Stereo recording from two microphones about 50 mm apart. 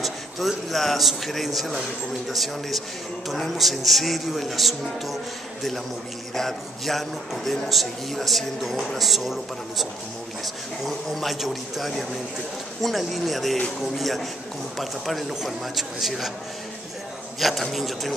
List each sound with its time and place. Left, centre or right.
0.0 s a man's voice: centre
17.4 s a man's voice: centre